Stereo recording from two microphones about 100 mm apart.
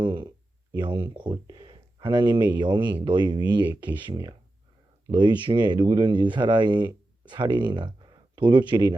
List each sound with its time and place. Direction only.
0.0 s speech: 50° right (ahead or behind)